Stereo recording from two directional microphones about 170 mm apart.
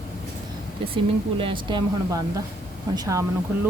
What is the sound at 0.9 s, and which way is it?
Speech, 30° right (ahead or behind).